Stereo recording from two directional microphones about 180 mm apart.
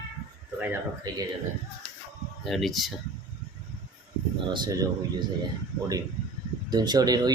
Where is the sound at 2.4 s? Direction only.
Centre (ahead or behind).